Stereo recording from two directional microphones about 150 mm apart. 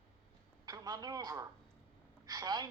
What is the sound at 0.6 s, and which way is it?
A woman's voice, 25° right (ahead or behind).